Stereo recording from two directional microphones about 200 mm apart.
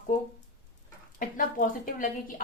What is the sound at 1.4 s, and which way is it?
A woman's voice, 40° left (ahead or behind).